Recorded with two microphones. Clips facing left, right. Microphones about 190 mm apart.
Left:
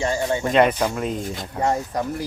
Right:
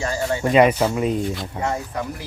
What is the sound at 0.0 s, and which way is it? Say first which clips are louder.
Speech: left 1 dB; 25° left (ahead or behind).